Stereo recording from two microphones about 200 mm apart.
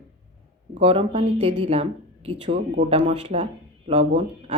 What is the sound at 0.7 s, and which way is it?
Speech, 30° right (ahead or behind).